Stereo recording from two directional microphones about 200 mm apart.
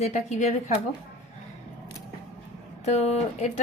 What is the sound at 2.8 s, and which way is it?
Speech, 30° left (ahead or behind).